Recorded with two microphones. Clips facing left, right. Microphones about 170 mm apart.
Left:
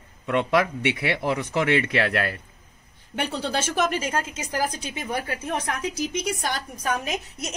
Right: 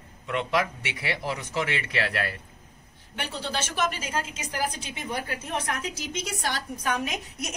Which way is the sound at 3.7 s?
50° left (ahead or behind).